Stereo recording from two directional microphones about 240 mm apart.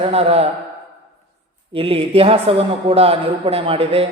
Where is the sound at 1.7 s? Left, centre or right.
Right.